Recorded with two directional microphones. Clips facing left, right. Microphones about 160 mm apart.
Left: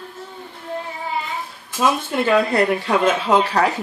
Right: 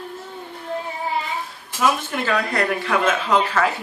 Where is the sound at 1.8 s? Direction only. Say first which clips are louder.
Left 2 dB; 25° left (ahead or behind).